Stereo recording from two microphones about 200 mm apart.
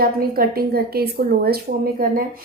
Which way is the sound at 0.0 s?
50° right (ahead or behind).